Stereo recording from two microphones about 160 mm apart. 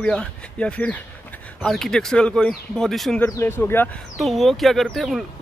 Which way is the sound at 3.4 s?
15° left (ahead or behind).